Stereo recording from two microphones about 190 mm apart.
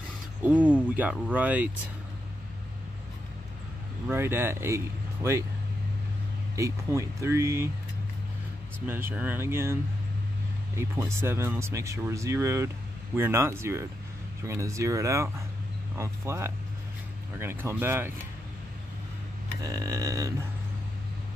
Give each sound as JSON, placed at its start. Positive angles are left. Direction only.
{"t": 0.4, "sound": "speech", "side_deg": -10}
{"t": 4.1, "sound": "speech", "side_deg": -10}
{"t": 6.5, "sound": "speech", "side_deg": -15}
{"t": 8.8, "sound": "speech", "side_deg": -10}
{"t": 10.8, "sound": "speech", "side_deg": -15}
{"t": 19.6, "sound": "speech", "side_deg": -20}